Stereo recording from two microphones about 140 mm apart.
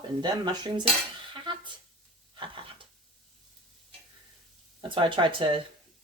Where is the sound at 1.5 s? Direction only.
35° right (ahead or behind).